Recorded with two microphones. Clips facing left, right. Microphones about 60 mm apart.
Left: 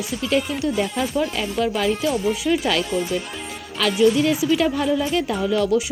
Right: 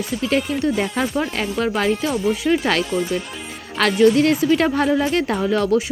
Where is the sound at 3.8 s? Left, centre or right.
Right.